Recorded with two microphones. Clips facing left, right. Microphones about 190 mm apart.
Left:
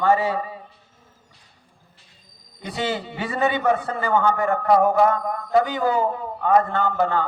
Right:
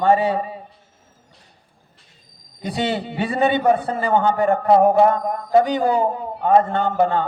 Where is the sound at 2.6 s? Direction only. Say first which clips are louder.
Right 3 dB; 35° right (ahead or behind).